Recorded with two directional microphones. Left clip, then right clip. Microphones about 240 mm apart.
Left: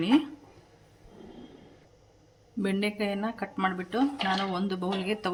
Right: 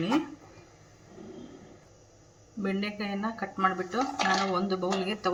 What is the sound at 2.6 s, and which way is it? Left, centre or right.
Speech, left.